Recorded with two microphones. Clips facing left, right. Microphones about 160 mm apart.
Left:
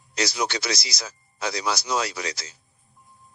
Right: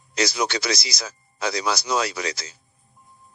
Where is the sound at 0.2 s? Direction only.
90° right.